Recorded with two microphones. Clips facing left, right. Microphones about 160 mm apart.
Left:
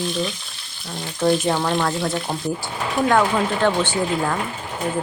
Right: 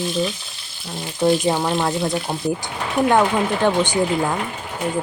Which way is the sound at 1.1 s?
15° right (ahead or behind).